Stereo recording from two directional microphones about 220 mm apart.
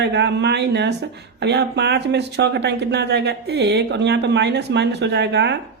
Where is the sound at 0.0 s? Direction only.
50° right (ahead or behind).